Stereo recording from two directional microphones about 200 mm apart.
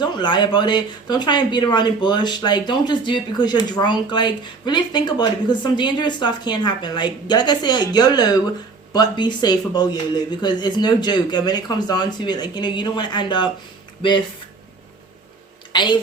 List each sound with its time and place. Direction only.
0.0 s speech: 20° left (ahead or behind)
15.7 s a woman's voice: 20° left (ahead or behind)